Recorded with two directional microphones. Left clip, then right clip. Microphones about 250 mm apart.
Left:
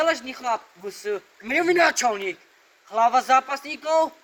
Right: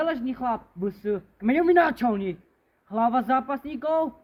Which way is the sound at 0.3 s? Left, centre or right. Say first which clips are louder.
Left 2 dB; centre.